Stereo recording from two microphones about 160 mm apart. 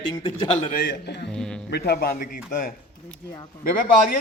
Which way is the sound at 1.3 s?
5° left (ahead or behind).